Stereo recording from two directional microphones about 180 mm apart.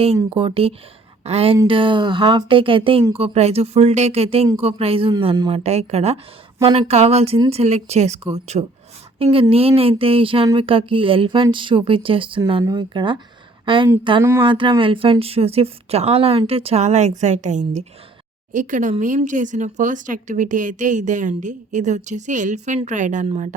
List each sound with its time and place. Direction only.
0.3 s a woman's voice: 30° right (ahead or behind)
1.6 s a sound: 30° right (ahead or behind)
3.3 s a woman's voice: 35° right (ahead or behind)
5.2 s a sound: 20° right (ahead or behind)
5.5 s a woman's voice: 35° right (ahead or behind)
10.0 s a sound: 30° right (ahead or behind)
13.7 s a woman's voice: 30° right (ahead or behind)
14.2 s speech: 15° right (ahead or behind)
14.4 s a woman's voice: 30° right (ahead or behind)